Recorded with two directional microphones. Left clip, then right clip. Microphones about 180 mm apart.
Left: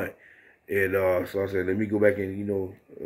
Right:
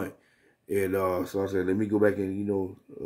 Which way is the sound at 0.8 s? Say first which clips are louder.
Left 4 dB; 30° right (ahead or behind).